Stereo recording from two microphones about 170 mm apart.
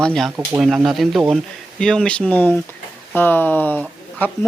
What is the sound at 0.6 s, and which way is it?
Speech, centre (ahead or behind).